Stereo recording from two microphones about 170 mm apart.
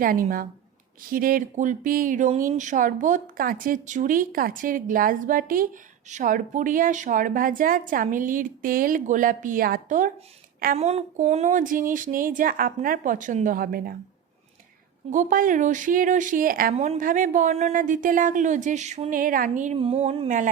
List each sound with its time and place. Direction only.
0.0 s speech: 55° right (ahead or behind)
10.8 s speech: 40° right (ahead or behind); by 13.9 s 60° right (ahead or behind)
15.1 s speech: 50° right (ahead or behind)
16.7 s a sound: 40° right (ahead or behind)
17.0 s speech: 50° right (ahead or behind)
19.8 s a sound: 35° right (ahead or behind)
20.2 s speech: 50° right (ahead or behind)